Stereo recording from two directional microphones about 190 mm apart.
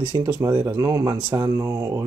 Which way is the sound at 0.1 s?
15° right (ahead or behind).